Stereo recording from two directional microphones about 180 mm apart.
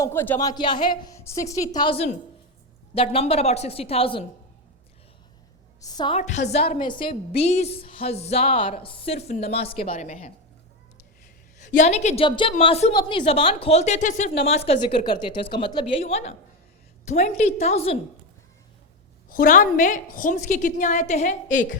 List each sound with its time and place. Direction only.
0.0 s a woman's voice: 15° left (ahead or behind); by 4.3 s 30° left (ahead or behind)
5.8 s a woman's voice: 20° left (ahead or behind)
6.1 s a woman's voice: 40° left (ahead or behind)
11.6 s a woman's voice: 40° left (ahead or behind)
12.9 s a woman's voice: 25° left (ahead or behind)
19.3 s a woman's voice: 50° left (ahead or behind)